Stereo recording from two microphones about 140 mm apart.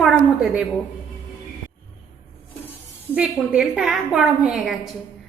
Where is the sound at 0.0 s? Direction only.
5° right (ahead or behind).